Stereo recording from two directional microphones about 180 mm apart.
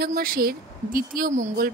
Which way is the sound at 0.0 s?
55° right (ahead or behind).